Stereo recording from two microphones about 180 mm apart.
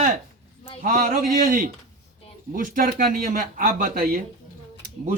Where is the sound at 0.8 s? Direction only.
50° right (ahead or behind).